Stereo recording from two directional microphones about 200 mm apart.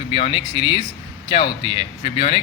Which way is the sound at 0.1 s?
30° left (ahead or behind).